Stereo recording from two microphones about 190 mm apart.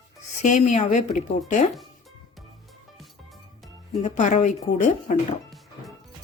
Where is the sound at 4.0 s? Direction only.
40° left (ahead or behind).